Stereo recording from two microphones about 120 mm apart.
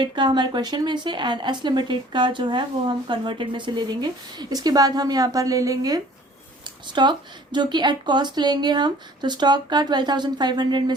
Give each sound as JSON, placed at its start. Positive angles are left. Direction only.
{"t": 0.0, "sound": "speech", "side_deg": -40}